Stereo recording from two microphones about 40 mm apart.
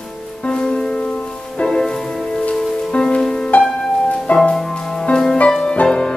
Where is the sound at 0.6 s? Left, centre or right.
Left.